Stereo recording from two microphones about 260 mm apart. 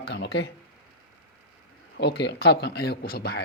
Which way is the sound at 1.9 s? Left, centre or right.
Left.